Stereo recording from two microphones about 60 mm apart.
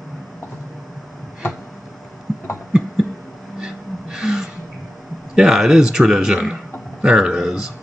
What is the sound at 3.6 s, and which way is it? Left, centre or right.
Gasp, centre.